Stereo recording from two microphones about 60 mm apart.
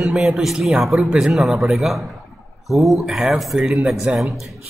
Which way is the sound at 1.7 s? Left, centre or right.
Centre.